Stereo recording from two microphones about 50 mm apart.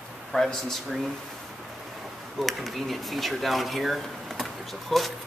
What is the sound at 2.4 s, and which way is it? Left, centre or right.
Speech, centre.